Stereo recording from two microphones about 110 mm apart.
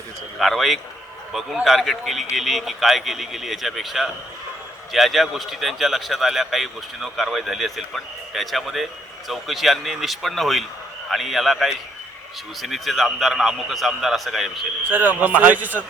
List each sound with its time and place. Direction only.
0.3 s a man's voice: centre (ahead or behind)
14.8 s a man's voice: 15° right (ahead or behind)